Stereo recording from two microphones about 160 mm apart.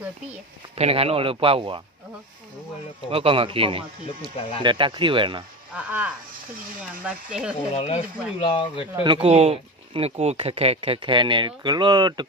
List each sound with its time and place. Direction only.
0.8 s speech: 40° right (ahead or behind)
3.1 s speech: 35° right (ahead or behind)
4.4 s speech: 35° left (ahead or behind)
4.6 s speech: 30° right (ahead or behind)
5.7 s speech: 10° right (ahead or behind)
7.8 s speech: 35° left (ahead or behind)
9.0 s speech: 35° right (ahead or behind)